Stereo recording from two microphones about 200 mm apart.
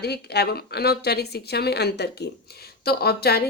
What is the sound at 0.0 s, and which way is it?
Speech, 55° left (ahead or behind).